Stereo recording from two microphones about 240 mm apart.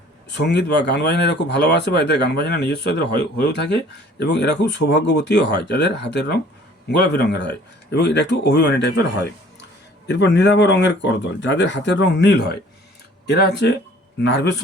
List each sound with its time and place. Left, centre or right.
0.3 s speech: left